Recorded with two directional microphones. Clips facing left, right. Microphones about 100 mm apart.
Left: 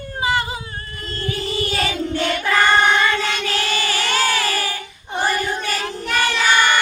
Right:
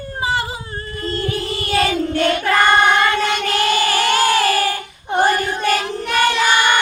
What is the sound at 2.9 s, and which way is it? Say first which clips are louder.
Child singing: right 3 dB; 50° right (ahead or behind).